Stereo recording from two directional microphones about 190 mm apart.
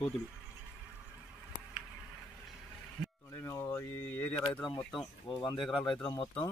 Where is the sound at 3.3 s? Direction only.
15° left (ahead or behind).